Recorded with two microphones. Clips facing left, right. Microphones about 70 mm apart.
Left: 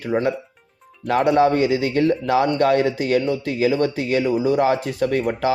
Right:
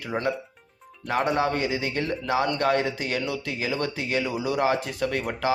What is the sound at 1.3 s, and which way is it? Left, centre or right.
A man's voice, left.